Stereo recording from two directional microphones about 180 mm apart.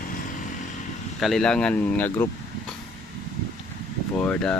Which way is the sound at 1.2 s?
Centre (ahead or behind).